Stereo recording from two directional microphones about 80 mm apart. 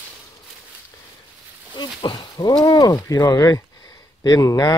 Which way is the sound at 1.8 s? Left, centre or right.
Left.